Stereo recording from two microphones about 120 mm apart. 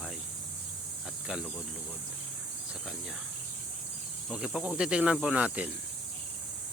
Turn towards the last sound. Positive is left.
turn(degrees=-10)  # may be behind; listen again after turning